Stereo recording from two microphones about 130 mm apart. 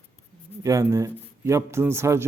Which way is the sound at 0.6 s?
25° right (ahead or behind).